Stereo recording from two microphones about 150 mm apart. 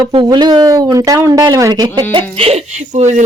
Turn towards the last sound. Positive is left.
turn(degrees=-50)  # may be behind; listen again after turning